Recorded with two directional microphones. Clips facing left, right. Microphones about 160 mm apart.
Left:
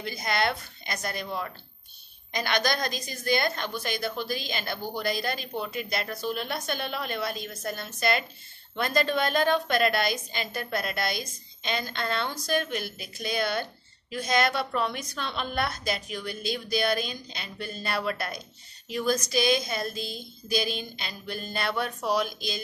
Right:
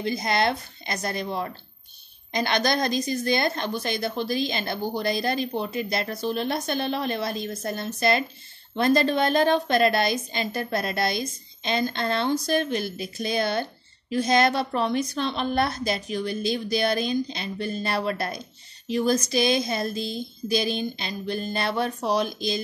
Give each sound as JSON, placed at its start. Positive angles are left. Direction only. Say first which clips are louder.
{"t": 0.0, "sound": "a woman's voice", "louder": "right 4 dB", "side_deg": -25}